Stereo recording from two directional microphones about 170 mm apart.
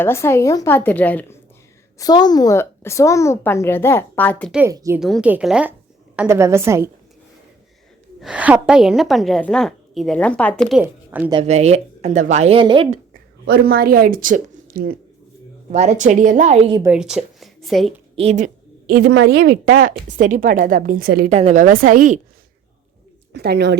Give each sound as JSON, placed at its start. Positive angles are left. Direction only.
{"t": 0.0, "sound": "a woman's voice", "side_deg": 15}
{"t": 2.0, "sound": "a woman's voice", "side_deg": 25}
{"t": 4.7, "sound": "speech", "side_deg": -20}
{"t": 4.9, "sound": "a woman's voice", "side_deg": 0}
{"t": 8.2, "sound": "a woman's voice", "side_deg": -5}
{"t": 11.4, "sound": "speech", "side_deg": -40}
{"t": 13.4, "sound": "speech", "side_deg": -65}
{"t": 15.7, "sound": "a woman's voice", "side_deg": -45}
{"t": 16.8, "sound": "a woman's voice", "side_deg": -5}
{"t": 18.2, "sound": "a woman's voice", "side_deg": -45}
{"t": 19.0, "sound": "a woman's voice", "side_deg": -90}
{"t": 21.3, "sound": "a woman's voice", "side_deg": -45}
{"t": 23.3, "sound": "speech", "side_deg": -75}